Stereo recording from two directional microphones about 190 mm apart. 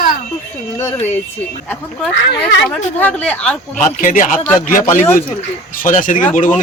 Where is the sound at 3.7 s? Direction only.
45° left (ahead or behind).